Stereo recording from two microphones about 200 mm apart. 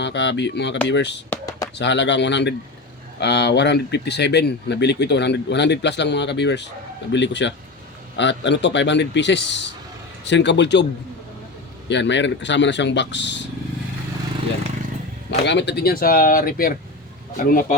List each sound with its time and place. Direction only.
0.0 s speech: 60° left (ahead or behind)
1.3 s a sound: 15° left (ahead or behind)
1.8 s speech: 60° left (ahead or behind)
11.9 s speech: 65° left (ahead or behind)
15.3 s speech: 60° left (ahead or behind); by 17.7 s 45° left (ahead or behind)